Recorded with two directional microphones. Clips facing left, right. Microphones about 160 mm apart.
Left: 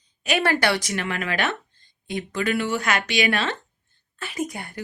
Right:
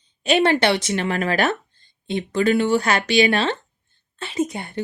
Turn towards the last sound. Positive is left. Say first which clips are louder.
# right 6 dB
turn(degrees=-25)  # may be behind; listen again after turning